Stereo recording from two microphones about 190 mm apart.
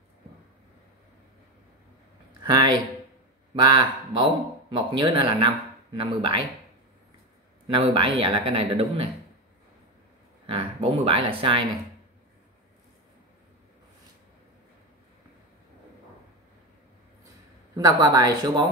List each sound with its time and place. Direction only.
2.4 s a man's voice: 25° right (ahead or behind)
7.6 s a man's voice: 25° right (ahead or behind)
10.4 s speech: 30° right (ahead or behind)
17.7 s a man's voice: 20° right (ahead or behind)